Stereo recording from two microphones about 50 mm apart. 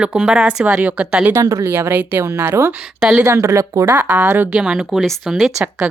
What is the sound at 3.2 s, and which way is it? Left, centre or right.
Speech, right.